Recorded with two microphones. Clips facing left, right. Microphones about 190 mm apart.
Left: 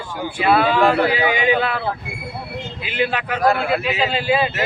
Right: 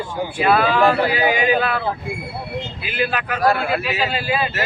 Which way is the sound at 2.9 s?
25° left (ahead or behind).